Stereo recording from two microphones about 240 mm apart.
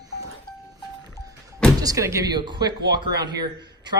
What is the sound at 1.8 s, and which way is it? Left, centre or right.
A man's voice, centre.